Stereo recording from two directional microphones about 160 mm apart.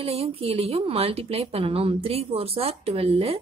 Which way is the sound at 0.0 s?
35° right (ahead or behind).